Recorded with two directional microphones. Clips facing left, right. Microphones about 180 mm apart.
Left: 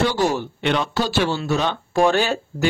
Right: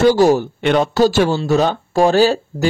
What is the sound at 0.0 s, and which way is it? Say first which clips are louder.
Speech: right 8 dB; 40° right (ahead or behind).